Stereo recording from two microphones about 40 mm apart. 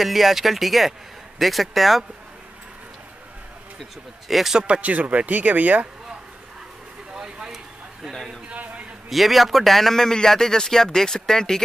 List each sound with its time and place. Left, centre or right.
0.0 s speech: centre
4.3 s speech: centre
4.8 s speech: right
7.2 s vehicle: centre
8.5 s a sound: right
9.1 s a man's voice: centre